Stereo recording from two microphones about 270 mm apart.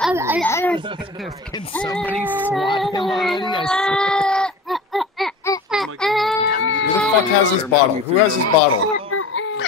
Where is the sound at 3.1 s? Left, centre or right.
Centre.